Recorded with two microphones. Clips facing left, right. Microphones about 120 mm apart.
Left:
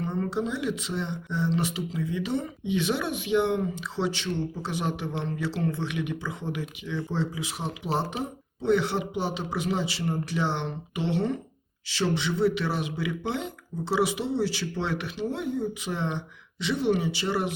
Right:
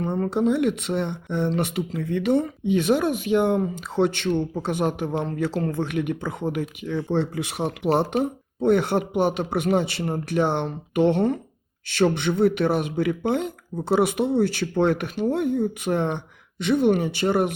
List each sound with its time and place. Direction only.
0.0 s speech: 50° right (ahead or behind)